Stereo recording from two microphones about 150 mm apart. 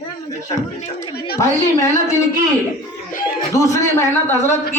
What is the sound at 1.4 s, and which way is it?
Speech, 20° left (ahead or behind).